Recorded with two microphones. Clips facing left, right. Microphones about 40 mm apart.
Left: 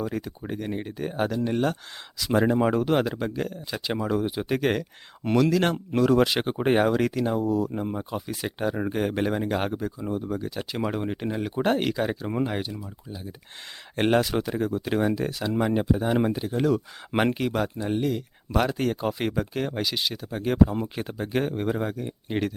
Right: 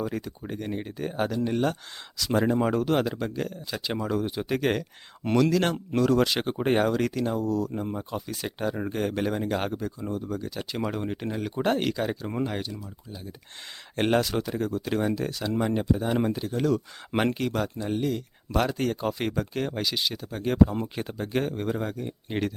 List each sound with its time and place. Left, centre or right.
0.0 s speech: centre
13.9 s speech: centre